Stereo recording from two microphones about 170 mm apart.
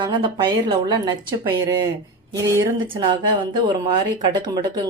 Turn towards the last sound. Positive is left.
turn(degrees=-25)  # may be behind; listen again after turning